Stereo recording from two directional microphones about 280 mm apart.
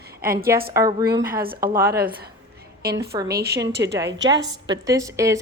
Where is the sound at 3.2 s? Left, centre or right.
Right.